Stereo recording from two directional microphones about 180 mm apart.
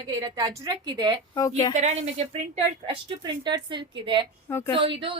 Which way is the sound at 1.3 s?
20° left (ahead or behind).